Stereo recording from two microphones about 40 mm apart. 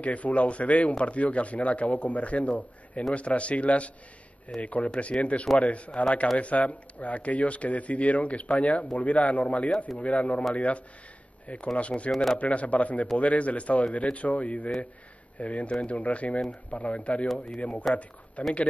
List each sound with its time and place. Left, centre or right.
0.0 s speech: left